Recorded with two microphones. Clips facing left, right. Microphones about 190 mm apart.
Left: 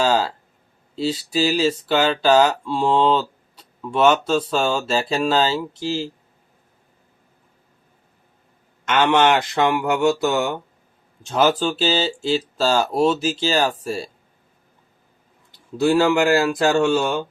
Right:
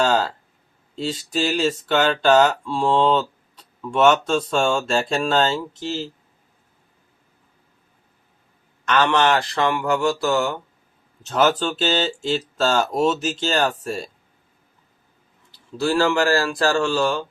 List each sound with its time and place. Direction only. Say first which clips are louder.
0.0 s speech: even; 5° left (ahead or behind)
8.8 s a sound: even; 20° left (ahead or behind)
9.0 s speech: left 5 dB; 20° left (ahead or behind)
15.8 s speech: left 3 dB; 20° left (ahead or behind)